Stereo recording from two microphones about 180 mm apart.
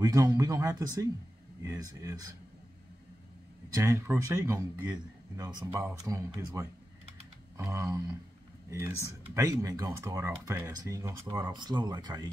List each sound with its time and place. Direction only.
0.0 s speech: 20° right (ahead or behind)
3.7 s speech: 15° right (ahead or behind)